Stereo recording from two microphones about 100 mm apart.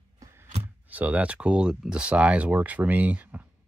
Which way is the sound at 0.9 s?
15° right (ahead or behind).